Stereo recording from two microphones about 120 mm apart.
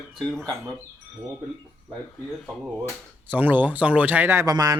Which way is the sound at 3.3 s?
15° right (ahead or behind).